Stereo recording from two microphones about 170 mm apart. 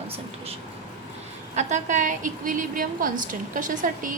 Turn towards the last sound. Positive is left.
turn(degrees=-50)  # may be behind; listen again after turning